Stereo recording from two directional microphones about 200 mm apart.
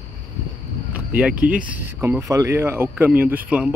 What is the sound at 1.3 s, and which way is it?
Speech, 40° right (ahead or behind).